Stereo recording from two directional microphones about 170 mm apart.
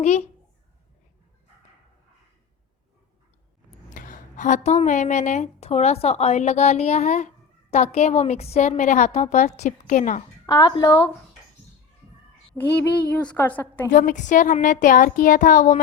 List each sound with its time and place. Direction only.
0.0 s a woman's voice: 40° left (ahead or behind)
3.8 s a woman's voice: 50° left (ahead or behind)
10.4 s a woman's voice: 25° left (ahead or behind)
12.6 s child singing: 85° left
13.1 s a woman's voice: 10° left (ahead or behind)
13.9 s a woman's voice: 50° left (ahead or behind)